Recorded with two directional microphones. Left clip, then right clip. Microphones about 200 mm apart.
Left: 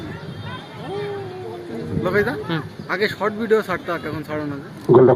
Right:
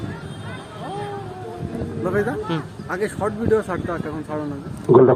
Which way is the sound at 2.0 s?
20° left (ahead or behind).